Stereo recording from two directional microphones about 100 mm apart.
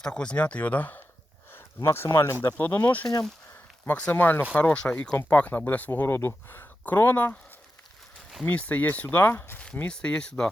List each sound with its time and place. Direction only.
0.0 s speech: 10° left (ahead or behind)
1.5 s a sound: 25° left (ahead or behind)
2.0 s speech: 30° left (ahead or behind)
2.6 s speech: 15° left (ahead or behind)
8.4 s speech: 15° left (ahead or behind)
9.7 s speech: 10° left (ahead or behind)